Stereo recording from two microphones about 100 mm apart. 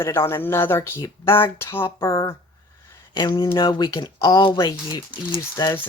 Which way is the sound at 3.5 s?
45° left (ahead or behind).